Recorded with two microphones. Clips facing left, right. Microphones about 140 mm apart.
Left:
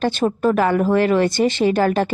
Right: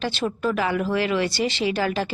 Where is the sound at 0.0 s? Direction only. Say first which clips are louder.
Left 7 dB; 50° left (ahead or behind).